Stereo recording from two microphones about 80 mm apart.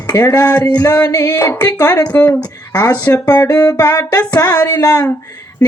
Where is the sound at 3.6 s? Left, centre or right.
Left.